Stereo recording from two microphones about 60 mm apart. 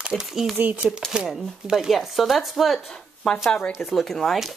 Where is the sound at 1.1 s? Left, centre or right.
Centre.